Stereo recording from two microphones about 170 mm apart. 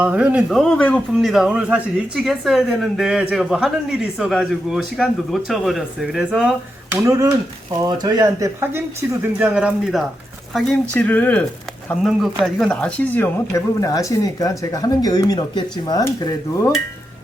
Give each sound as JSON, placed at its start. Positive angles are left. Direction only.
{"t": 0.0, "sound": "speech", "side_deg": -10}
{"t": 1.3, "sound": "speech", "side_deg": -5}
{"t": 6.9, "sound": "speech", "side_deg": -20}
{"t": 9.2, "sound": "speech", "side_deg": -10}